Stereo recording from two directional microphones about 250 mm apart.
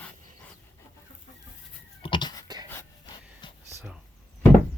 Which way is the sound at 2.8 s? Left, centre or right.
Centre.